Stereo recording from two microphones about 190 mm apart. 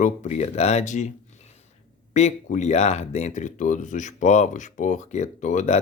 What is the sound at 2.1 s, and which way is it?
Speech, 35° left (ahead or behind).